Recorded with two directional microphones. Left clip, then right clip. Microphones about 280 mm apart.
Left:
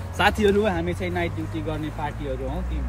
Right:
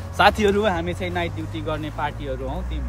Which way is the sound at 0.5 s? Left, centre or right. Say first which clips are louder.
Right 1 dB; centre.